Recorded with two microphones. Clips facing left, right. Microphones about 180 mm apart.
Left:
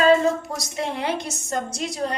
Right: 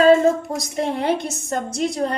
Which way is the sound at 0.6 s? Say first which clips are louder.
Right 4 dB; 55° right (ahead or behind).